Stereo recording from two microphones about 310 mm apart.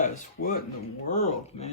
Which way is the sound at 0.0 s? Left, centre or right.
Left.